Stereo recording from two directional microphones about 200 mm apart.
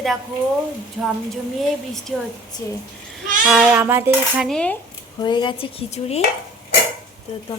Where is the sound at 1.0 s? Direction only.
5° right (ahead or behind).